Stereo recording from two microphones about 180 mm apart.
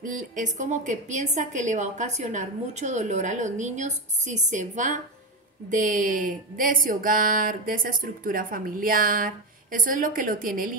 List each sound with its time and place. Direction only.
0.0 s speech: 45° right (ahead or behind)